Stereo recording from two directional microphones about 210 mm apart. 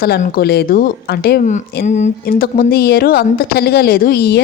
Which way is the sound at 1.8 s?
35° left (ahead or behind).